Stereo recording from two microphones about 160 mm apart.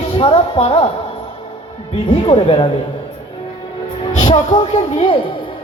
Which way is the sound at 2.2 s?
35° left (ahead or behind).